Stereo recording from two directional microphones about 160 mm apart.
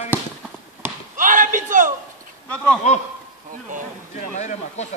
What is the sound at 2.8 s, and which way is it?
Speech, 50° left (ahead or behind).